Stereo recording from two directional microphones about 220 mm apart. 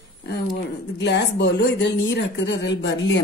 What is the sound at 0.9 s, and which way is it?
Speech, 50° left (ahead or behind).